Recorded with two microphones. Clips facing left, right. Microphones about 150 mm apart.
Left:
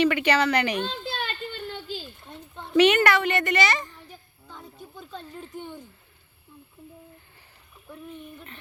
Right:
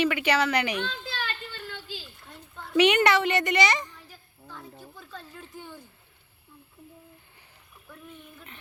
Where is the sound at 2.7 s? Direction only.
15° right (ahead or behind).